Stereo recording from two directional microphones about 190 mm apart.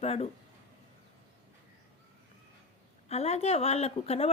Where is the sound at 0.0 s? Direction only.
35° left (ahead or behind).